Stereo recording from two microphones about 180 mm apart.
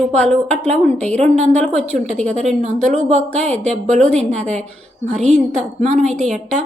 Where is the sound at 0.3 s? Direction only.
40° right (ahead or behind).